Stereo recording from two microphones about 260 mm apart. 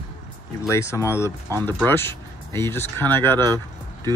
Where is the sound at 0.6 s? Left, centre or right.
Centre.